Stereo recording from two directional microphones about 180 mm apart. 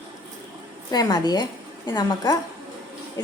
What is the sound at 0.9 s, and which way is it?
A woman's voice, 20° left (ahead or behind).